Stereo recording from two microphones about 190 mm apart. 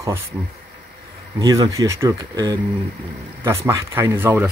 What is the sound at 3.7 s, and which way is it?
Speech, 15° right (ahead or behind).